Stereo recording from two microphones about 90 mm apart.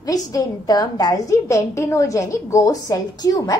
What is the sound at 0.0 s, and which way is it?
A woman's voice, 45° left (ahead or behind).